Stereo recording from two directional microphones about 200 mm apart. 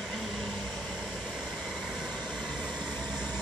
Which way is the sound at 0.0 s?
Centre (ahead or behind).